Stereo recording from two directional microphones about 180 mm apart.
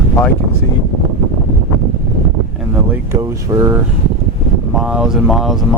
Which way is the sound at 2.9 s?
15° right (ahead or behind).